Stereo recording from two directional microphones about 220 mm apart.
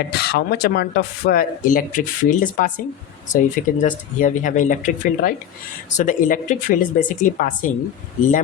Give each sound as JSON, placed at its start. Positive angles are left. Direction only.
{"t": 0.1, "sound": "speech", "side_deg": 45}